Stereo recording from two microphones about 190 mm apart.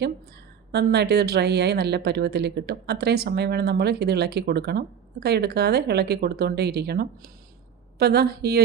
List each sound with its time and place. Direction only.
0.7 s a woman's voice: 60° right (ahead or behind)